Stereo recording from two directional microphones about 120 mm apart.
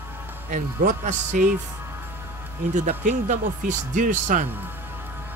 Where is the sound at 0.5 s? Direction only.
90° right.